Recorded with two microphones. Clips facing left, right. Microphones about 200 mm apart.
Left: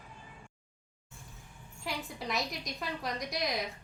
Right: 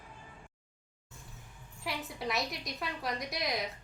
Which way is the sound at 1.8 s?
Centre (ahead or behind).